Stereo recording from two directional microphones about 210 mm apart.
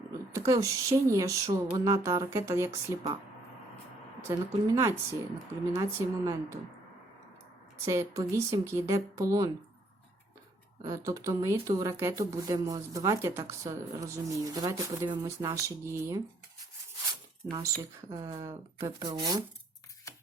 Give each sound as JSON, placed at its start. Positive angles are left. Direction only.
{"t": 0.3, "sound": "speech", "side_deg": -15}
{"t": 4.3, "sound": "speech", "side_deg": -15}
{"t": 7.9, "sound": "speech", "side_deg": -15}
{"t": 10.8, "sound": "speech", "side_deg": -15}
{"t": 17.5, "sound": "speech", "side_deg": -15}